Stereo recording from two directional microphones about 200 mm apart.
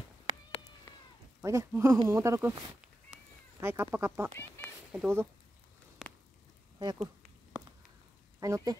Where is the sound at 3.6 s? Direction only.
10° right (ahead or behind).